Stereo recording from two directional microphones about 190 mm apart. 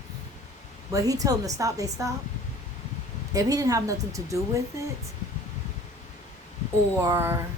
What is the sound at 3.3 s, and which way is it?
Speech, 20° right (ahead or behind).